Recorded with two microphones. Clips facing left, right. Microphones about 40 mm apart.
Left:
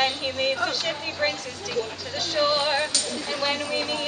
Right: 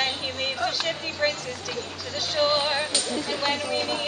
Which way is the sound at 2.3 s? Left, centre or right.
Centre.